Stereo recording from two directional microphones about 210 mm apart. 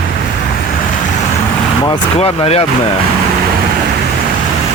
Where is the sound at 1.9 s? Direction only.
25° left (ahead or behind).